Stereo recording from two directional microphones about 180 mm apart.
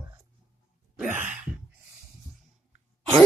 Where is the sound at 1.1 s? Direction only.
10° right (ahead or behind).